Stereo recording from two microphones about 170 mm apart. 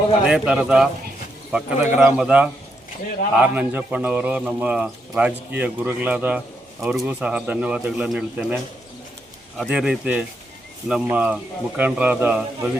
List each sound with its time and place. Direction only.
0.3 s a man's voice: 5° right (ahead or behind)
9.6 s a man's voice: 5° right (ahead or behind)